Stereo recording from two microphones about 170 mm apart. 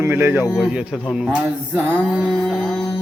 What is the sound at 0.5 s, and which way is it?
Music, 5° right (ahead or behind).